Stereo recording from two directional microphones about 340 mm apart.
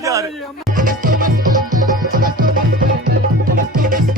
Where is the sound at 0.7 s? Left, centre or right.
Right.